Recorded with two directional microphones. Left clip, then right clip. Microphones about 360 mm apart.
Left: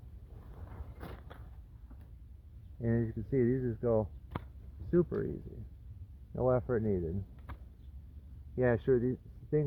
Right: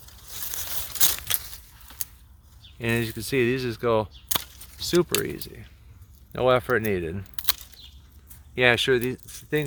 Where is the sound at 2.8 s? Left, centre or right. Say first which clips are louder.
Right 9 dB; right.